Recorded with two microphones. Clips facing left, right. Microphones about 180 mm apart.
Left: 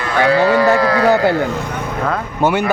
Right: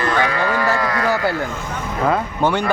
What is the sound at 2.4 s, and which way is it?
Speech, 10° left (ahead or behind).